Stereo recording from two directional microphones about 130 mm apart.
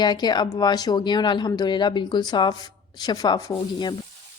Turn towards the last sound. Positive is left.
turn(degrees=30)  # may be behind; listen again after turning